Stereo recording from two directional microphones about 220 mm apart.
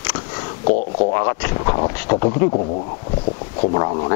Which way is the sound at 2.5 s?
35° left (ahead or behind).